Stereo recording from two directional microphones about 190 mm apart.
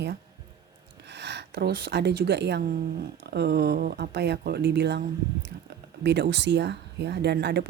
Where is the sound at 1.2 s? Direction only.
65° right (ahead or behind).